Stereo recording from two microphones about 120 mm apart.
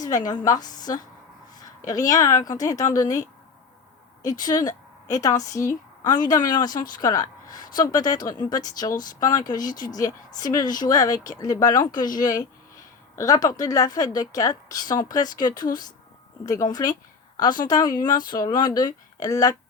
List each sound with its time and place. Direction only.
0.0 s a woman's voice: 35° left (ahead or behind)
4.2 s a woman's voice: 35° left (ahead or behind)